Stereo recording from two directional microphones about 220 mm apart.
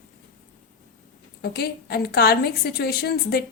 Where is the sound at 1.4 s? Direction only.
45° left (ahead or behind).